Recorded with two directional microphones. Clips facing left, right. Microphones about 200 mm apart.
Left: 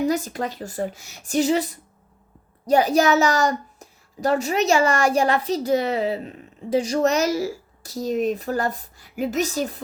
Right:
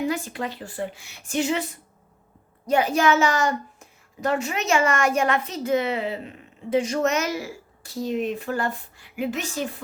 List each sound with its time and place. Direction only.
0.0 s a child's voice: 40° left (ahead or behind)